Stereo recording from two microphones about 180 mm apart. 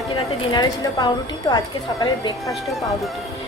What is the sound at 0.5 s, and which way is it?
A woman's voice, 20° left (ahead or behind).